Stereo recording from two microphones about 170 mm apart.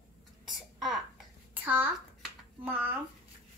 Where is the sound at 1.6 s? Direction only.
10° right (ahead or behind).